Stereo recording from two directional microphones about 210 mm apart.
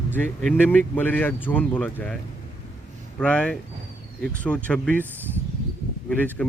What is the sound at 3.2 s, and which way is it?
Speech, 5° left (ahead or behind).